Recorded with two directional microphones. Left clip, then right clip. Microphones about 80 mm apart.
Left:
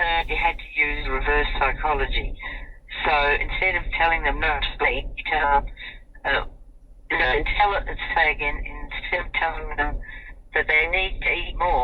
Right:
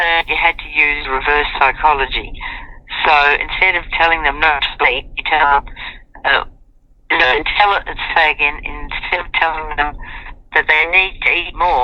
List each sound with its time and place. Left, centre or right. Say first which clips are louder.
0.0 s a woman's voice: right 8 dB; right
7.1 s speech: right 8 dB; right